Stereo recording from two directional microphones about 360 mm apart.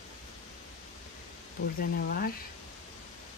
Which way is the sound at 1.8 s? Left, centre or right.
Left.